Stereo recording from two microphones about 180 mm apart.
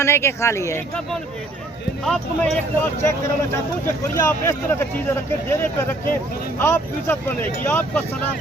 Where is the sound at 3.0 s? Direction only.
15° left (ahead or behind).